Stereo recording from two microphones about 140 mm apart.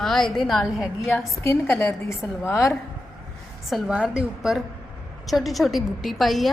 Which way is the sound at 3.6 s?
Centre (ahead or behind).